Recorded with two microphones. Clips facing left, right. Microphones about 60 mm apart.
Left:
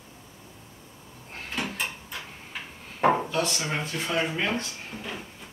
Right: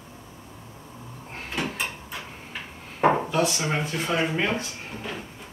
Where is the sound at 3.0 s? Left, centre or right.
Centre.